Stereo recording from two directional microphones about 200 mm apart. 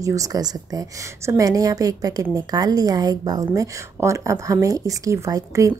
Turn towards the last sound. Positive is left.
turn(degrees=-15)  # may be behind; listen again after turning